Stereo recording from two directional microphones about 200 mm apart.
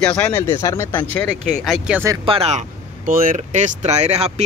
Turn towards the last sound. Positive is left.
turn(degrees=-35)  # may be behind; listen again after turning